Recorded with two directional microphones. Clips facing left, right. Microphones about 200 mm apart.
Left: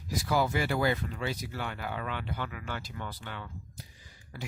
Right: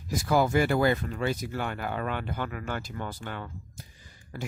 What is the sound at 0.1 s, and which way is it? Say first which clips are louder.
Speech: right 4 dB; 50° right (ahead or behind).